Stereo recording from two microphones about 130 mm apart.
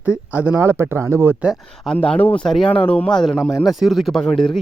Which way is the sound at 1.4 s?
5° right (ahead or behind).